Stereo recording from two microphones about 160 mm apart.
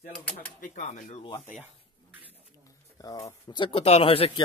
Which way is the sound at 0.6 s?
55° left (ahead or behind).